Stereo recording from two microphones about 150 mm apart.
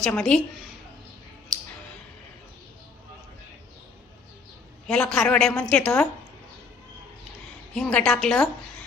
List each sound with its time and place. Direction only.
0.0 s a woman's voice: 5° left (ahead or behind)
1.5 s a sound: centre (ahead or behind)
4.9 s a woman's voice: 5° left (ahead or behind)
7.7 s a woman's voice: 5° left (ahead or behind)